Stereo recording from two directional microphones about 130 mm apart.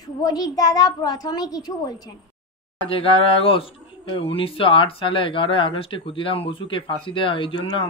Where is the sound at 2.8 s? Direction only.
45° left (ahead or behind).